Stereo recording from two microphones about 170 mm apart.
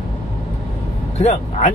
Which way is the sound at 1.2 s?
40° left (ahead or behind).